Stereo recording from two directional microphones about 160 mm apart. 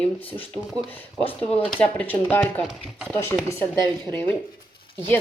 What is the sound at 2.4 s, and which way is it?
Speech, centre (ahead or behind).